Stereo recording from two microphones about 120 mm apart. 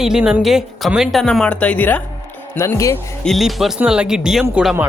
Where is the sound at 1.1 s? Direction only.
5° left (ahead or behind); by 3.0 s 20° left (ahead or behind).